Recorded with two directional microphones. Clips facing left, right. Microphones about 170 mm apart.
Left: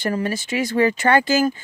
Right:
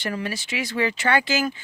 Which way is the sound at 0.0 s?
40° left (ahead or behind).